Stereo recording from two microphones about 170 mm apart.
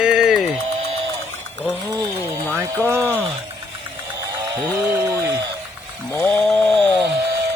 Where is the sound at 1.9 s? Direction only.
20° right (ahead or behind).